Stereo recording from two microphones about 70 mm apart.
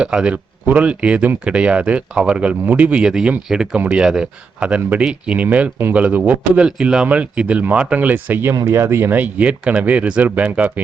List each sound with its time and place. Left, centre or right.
0.0 s speech: centre
3.0 s speech: centre
6.7 s speech: centre; by 8.5 s right
8.6 s speech: right; by 10.8 s centre